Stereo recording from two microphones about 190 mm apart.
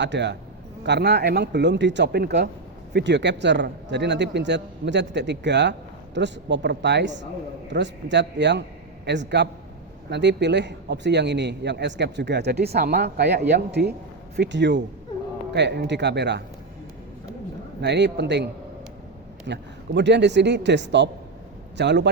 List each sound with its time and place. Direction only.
0.0 s a man's voice: 65° right (ahead or behind)
17.7 s a man's voice: 65° right (ahead or behind)
19.5 s a man's voice: 65° right (ahead or behind)